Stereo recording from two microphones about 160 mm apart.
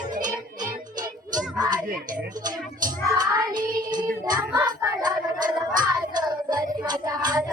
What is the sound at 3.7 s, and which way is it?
Child singing, 55° right (ahead or behind).